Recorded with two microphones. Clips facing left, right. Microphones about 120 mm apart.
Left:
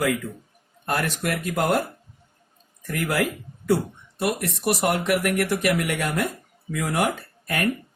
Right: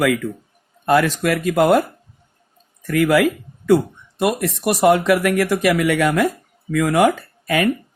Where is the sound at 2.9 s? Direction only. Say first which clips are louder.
Right 9 dB; 90° right.